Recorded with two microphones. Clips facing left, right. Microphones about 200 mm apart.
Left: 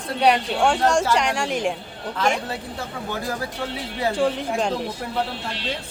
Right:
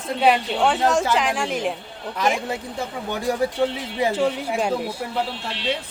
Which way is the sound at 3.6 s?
20° right (ahead or behind).